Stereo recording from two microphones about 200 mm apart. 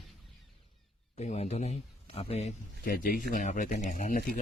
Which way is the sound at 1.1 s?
35° left (ahead or behind).